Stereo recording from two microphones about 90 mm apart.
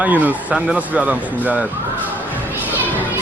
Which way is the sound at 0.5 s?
5° right (ahead or behind).